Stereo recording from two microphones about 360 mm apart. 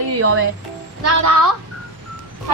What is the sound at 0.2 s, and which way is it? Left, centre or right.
Speech, right.